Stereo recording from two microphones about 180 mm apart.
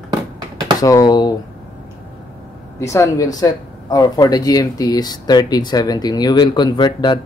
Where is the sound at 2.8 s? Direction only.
15° left (ahead or behind).